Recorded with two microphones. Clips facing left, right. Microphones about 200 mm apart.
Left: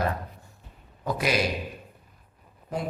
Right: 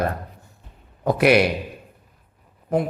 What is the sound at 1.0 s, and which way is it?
Speech, 65° right (ahead or behind).